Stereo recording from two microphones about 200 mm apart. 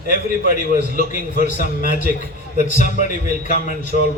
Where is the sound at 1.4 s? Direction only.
40° left (ahead or behind).